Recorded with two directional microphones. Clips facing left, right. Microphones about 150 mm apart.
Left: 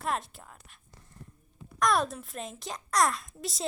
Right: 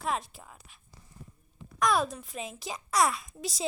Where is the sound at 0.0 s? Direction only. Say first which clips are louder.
Even; centre (ahead or behind).